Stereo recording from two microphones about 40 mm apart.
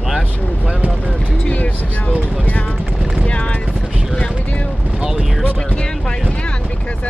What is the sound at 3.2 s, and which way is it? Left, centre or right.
Vehicle, left.